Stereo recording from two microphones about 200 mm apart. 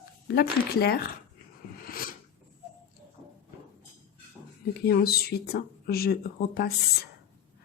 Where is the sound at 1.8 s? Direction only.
45° left (ahead or behind).